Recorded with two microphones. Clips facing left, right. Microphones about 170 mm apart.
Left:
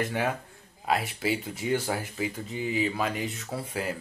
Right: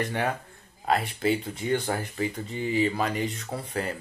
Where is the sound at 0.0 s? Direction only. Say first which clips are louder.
Even; 5° left (ahead or behind).